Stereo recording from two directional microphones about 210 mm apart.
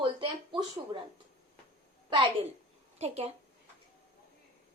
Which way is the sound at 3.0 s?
30° right (ahead or behind).